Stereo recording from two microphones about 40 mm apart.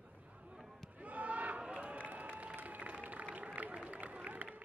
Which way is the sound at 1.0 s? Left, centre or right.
Right.